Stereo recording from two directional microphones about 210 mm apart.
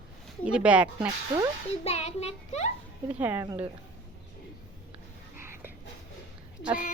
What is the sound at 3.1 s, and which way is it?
Speech, 10° right (ahead or behind).